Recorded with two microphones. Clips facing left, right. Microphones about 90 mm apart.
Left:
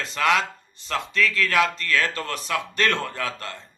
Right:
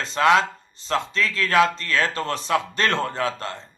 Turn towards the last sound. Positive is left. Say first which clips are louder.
# right 4 dB
turn(degrees=-30)  # may be behind; listen again after turning